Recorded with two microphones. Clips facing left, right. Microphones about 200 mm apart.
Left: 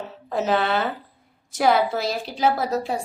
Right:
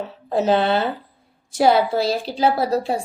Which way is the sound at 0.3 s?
30° right (ahead or behind).